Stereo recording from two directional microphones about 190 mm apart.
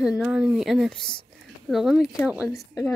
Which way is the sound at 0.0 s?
5° right (ahead or behind).